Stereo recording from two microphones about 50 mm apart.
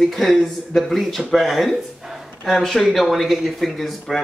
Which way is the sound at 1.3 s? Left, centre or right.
Centre.